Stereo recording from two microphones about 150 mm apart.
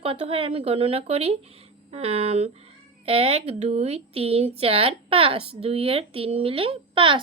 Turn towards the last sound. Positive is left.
turn(degrees=-35)  # may be behind; listen again after turning